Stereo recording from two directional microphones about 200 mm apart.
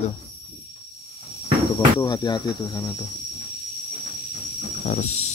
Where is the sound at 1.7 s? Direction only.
20° left (ahead or behind).